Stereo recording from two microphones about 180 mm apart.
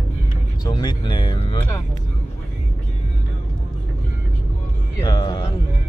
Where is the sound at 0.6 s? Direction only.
20° left (ahead or behind).